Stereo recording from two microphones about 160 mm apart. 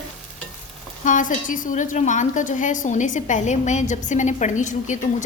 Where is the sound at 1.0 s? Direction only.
55° left (ahead or behind).